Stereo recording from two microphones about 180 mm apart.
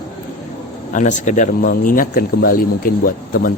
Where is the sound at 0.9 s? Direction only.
45° left (ahead or behind).